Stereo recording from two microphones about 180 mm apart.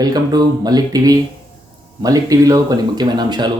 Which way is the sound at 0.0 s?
20° right (ahead or behind).